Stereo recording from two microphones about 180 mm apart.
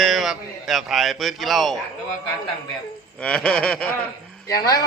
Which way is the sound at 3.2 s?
5° left (ahead or behind).